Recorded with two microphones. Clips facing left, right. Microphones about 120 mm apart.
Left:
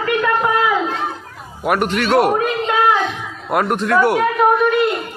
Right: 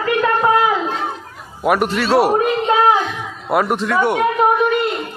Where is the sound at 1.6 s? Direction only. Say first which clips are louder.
Right 2 dB; 5° right (ahead or behind).